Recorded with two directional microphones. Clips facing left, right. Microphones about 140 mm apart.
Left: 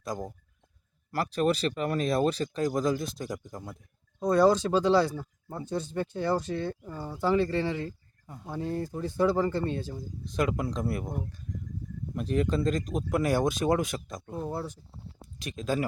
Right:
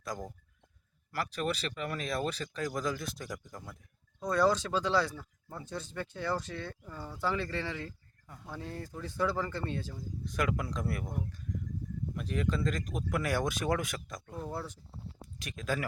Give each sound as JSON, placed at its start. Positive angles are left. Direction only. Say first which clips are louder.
{"t": 0.0, "sound": "speech", "louder": "left 5 dB", "side_deg": 25}
{"t": 1.1, "sound": "speech", "louder": "left 7 dB", "side_deg": 35}